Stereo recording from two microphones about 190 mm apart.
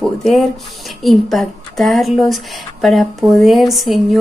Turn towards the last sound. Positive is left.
turn(degrees=0)  # may be behind; listen again after turning